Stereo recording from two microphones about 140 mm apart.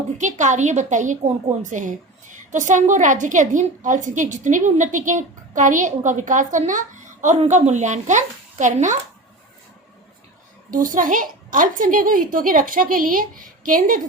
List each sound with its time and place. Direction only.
0.2 s a woman's voice: 60° right (ahead or behind)
10.8 s a child's voice: 70° right (ahead or behind)